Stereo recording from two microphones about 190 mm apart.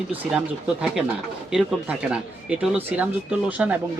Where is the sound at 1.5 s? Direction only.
5° right (ahead or behind).